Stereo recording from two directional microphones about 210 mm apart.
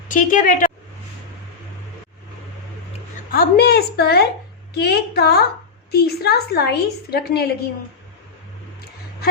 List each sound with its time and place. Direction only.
0.1 s a woman's voice: 40° left (ahead or behind)
3.3 s a woman's voice: 50° left (ahead or behind)